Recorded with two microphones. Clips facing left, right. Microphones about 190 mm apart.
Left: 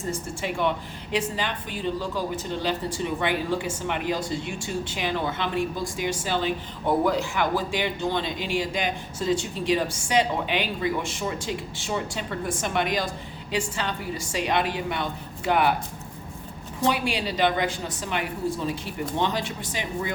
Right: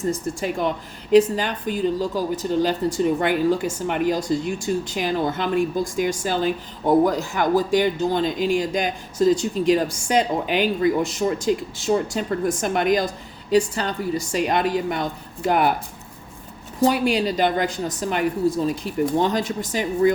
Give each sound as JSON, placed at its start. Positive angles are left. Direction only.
{"t": 0.1, "sound": "a woman's voice", "side_deg": -40}
{"t": 16.8, "sound": "a woman's voice", "side_deg": -40}